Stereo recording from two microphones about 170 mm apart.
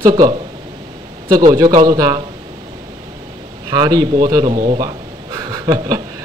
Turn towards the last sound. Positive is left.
turn(degrees=-20)  # may be behind; listen again after turning